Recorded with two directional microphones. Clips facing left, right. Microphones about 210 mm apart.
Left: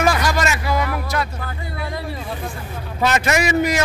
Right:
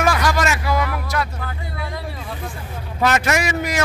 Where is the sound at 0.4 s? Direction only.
5° right (ahead or behind).